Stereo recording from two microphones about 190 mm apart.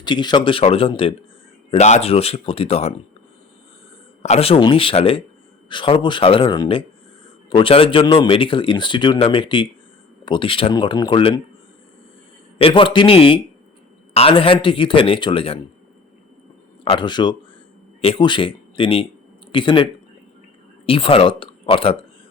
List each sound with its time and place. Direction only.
0.0 s speech: 25° left (ahead or behind)
4.2 s speech: 35° left (ahead or behind)
12.6 s speech: 25° left (ahead or behind)
16.9 s speech: 25° left (ahead or behind)